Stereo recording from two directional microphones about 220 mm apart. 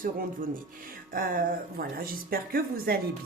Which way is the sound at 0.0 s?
40° right (ahead or behind).